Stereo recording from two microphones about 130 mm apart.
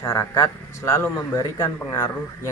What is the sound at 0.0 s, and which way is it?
A man's voice, 25° left (ahead or behind).